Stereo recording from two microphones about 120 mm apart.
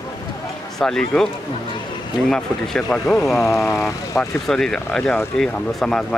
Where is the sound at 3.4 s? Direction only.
25° left (ahead or behind).